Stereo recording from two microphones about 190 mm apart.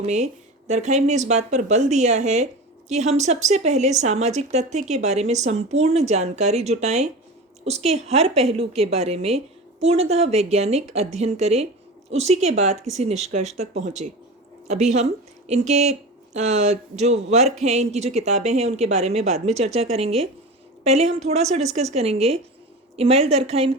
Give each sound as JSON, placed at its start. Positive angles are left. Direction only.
{"t": 0.0, "sound": "speech", "side_deg": -40}
{"t": 14.9, "sound": "speech", "side_deg": -35}